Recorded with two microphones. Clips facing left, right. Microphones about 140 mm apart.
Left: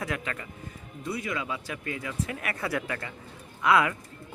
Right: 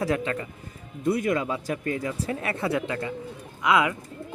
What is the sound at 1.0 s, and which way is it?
Speech, 50° right (ahead or behind).